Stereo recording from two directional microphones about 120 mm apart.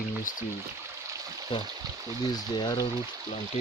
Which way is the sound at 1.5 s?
45° left (ahead or behind).